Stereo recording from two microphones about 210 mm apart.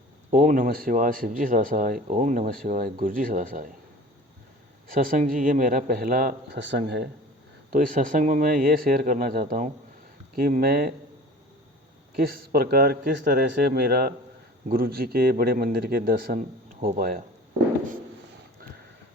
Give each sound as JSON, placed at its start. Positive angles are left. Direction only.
{"t": 0.3, "sound": "speech", "side_deg": -40}
{"t": 4.9, "sound": "speech", "side_deg": -40}
{"t": 6.6, "sound": "speech", "side_deg": -55}
{"t": 7.7, "sound": "speech", "side_deg": -40}
{"t": 12.1, "sound": "speech", "side_deg": -45}